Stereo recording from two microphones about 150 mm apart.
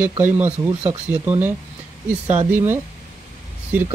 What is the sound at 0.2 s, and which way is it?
Speech, 15° right (ahead or behind).